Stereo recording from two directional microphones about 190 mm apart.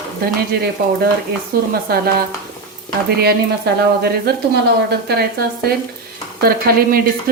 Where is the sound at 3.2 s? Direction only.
55° right (ahead or behind).